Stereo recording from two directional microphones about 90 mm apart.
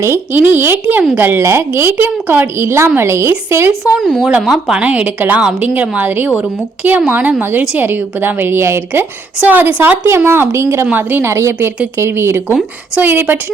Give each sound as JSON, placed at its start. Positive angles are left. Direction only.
{"t": 0.0, "sound": "speech", "side_deg": -25}
{"t": 3.9, "sound": "speech", "side_deg": 5}
{"t": 4.3, "sound": "a woman's voice", "side_deg": -5}
{"t": 4.8, "sound": "a woman's voice", "side_deg": -15}
{"t": 10.8, "sound": "speech", "side_deg": -20}